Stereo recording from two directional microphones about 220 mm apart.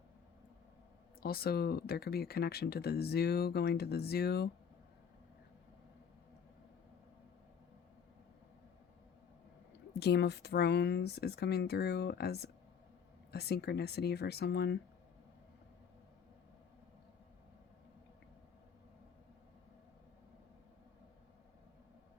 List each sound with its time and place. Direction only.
1.2 s speech: 45° left (ahead or behind)
9.9 s speech: 50° left (ahead or behind)